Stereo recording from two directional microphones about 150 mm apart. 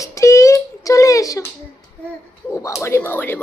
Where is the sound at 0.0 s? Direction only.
20° left (ahead or behind).